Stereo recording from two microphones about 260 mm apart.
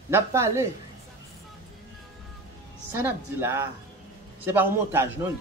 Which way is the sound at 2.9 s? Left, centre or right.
Centre.